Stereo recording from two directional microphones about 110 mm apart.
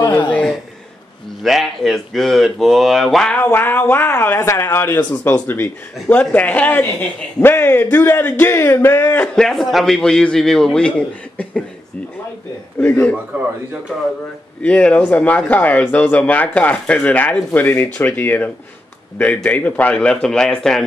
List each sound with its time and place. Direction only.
1.4 s a man's voice: centre (ahead or behind)
3.3 s speech: 20° left (ahead or behind)
9.3 s a man's voice: 5° left (ahead or behind)
12.7 s speech: 20° left (ahead or behind)
14.6 s speech: 10° left (ahead or behind)